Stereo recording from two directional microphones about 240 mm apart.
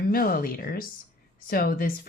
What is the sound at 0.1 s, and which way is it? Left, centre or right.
Speech, left.